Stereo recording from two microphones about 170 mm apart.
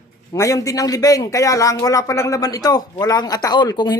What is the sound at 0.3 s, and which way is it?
A man's voice, 20° left (ahead or behind).